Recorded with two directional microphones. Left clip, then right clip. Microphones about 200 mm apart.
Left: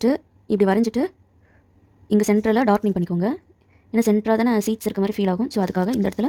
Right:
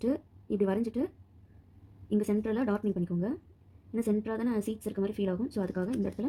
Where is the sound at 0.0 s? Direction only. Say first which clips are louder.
Left 11 dB; 60° left (ahead or behind).